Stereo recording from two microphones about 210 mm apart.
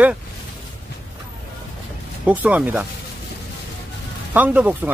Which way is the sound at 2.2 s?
5° right (ahead or behind).